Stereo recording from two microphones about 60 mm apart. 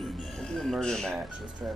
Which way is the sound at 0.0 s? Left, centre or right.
Centre.